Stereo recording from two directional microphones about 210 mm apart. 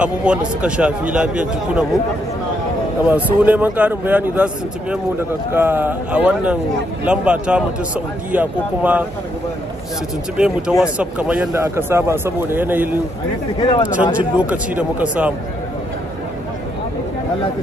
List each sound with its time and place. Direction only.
0.0 s a man's voice: 5° right (ahead or behind)
3.1 s speech: 10° right (ahead or behind)
5.5 s speech: 10° right (ahead or behind)
10.3 s speech: 5° right (ahead or behind)
13.6 s speech: 20° left (ahead or behind)
14.1 s speech: 5° right (ahead or behind)